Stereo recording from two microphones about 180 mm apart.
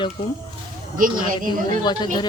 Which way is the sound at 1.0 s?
50° right (ahead or behind).